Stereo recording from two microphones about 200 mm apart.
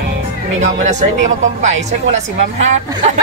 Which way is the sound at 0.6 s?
35° right (ahead or behind).